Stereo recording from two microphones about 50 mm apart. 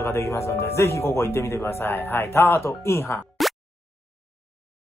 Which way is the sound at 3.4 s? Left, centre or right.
Centre.